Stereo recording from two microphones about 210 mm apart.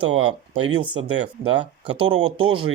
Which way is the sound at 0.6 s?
90° right.